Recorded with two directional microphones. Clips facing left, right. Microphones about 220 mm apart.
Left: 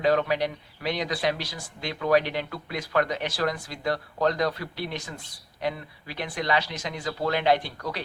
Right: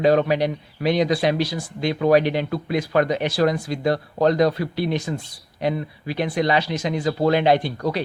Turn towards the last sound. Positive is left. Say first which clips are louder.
# right 6 dB
turn(degrees=-15)  # may be behind; listen again after turning